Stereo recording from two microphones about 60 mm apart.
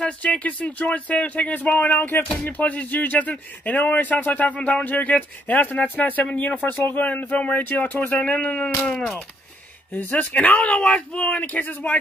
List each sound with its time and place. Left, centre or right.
0.0 s speech: centre
9.9 s speech: left